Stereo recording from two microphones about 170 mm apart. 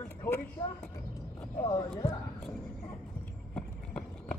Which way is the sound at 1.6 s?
30° left (ahead or behind).